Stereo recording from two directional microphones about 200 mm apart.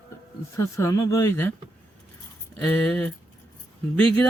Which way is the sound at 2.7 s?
5° left (ahead or behind).